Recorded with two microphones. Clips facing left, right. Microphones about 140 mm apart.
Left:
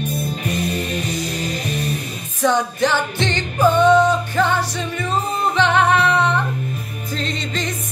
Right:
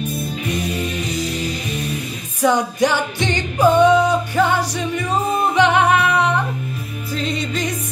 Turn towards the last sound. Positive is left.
turn(degrees=-10)  # may be behind; listen again after turning